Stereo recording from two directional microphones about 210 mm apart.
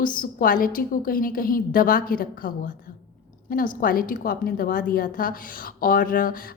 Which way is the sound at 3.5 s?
40° left (ahead or behind).